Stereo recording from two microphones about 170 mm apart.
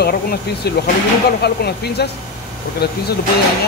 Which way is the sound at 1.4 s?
75° left (ahead or behind).